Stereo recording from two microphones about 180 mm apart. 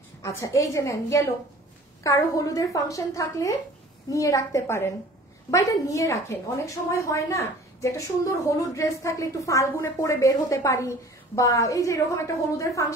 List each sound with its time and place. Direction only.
0.2 s a woman's voice: 15° left (ahead or behind)